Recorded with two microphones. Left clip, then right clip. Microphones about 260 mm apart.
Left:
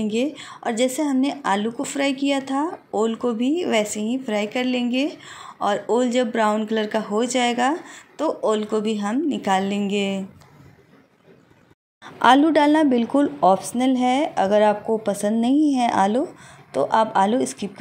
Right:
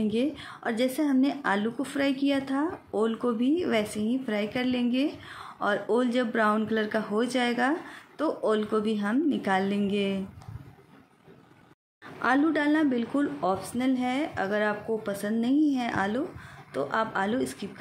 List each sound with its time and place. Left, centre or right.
0.0 s speech: centre
12.0 s speech: left